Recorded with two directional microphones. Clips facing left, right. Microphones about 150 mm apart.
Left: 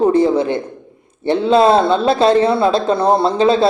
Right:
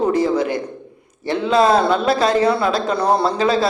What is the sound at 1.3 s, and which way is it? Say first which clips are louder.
A man's voice: left 3 dB; 30° left (ahead or behind).